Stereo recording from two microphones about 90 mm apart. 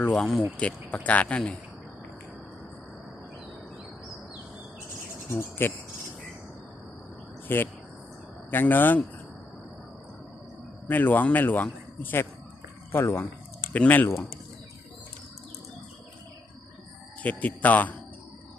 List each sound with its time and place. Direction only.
0.1 s speech: 5° left (ahead or behind)
5.3 s speech: 25° left (ahead or behind)
7.4 s speech: 20° left (ahead or behind)
10.8 s speech: 20° left (ahead or behind)
17.2 s speech: 15° left (ahead or behind)